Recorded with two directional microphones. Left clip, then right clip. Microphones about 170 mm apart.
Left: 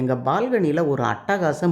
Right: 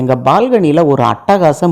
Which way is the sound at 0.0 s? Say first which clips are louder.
Right 11 dB; 35° right (ahead or behind).